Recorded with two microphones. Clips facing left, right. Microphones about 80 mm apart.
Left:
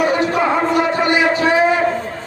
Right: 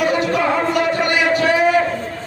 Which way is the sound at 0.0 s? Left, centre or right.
Left.